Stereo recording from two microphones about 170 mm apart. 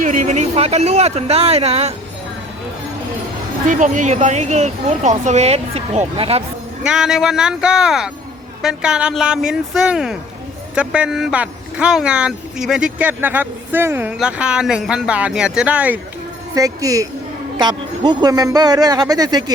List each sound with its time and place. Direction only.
0.0 s speech: 50° right (ahead or behind)
3.7 s speech: 50° right (ahead or behind)
6.8 s speech: 5° right (ahead or behind)
16.6 s speech: 20° right (ahead or behind)